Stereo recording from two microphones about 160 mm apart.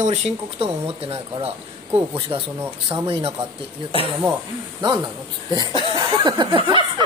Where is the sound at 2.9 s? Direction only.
35° right (ahead or behind).